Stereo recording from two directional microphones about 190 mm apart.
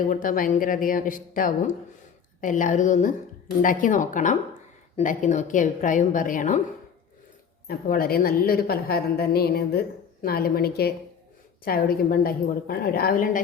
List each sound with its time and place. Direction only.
0.1 s a woman's voice: 45° left (ahead or behind)
7.7 s a woman's voice: 50° left (ahead or behind)